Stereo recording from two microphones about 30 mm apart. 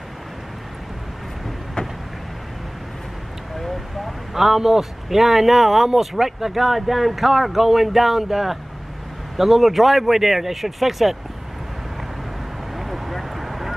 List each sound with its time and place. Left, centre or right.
1.8 s vehicle: left
3.5 s vehicle: centre
4.3 s speech: centre
12.7 s a sound: centre